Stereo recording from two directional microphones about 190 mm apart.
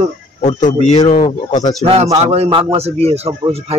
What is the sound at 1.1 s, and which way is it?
Speech, 40° left (ahead or behind).